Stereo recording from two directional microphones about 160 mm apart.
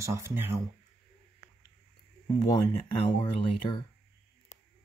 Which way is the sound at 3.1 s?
30° left (ahead or behind).